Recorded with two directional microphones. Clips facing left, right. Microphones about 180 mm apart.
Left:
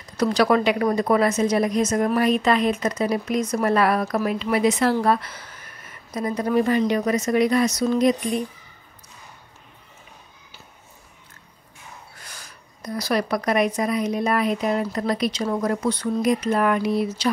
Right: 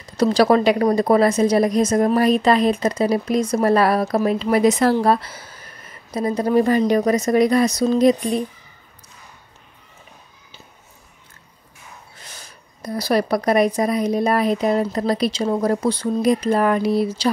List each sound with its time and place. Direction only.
0.2 s a woman's voice: 30° right (ahead or behind)
12.2 s a woman's voice: 25° right (ahead or behind)